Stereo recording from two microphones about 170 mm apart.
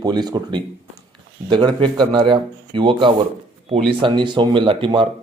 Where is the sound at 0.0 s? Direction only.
25° right (ahead or behind).